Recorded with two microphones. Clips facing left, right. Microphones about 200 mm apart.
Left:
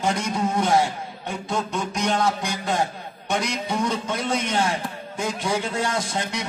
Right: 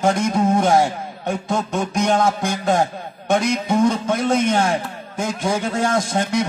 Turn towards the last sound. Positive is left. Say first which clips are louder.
# right 7 dB
turn(degrees=-45)  # may be behind; listen again after turning